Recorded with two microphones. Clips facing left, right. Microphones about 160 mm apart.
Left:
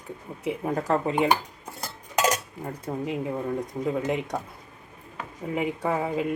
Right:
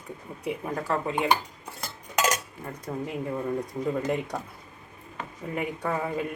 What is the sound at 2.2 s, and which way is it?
Cutlery, 15° left (ahead or behind).